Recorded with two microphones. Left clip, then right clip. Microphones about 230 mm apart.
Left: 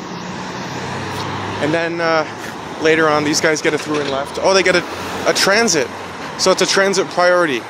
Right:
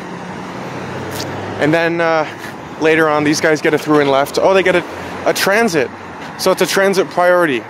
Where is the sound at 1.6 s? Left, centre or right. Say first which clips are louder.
Right 4 dB; right.